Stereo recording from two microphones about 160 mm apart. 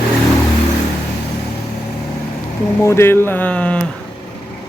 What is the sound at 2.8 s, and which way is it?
Speech, 15° left (ahead or behind).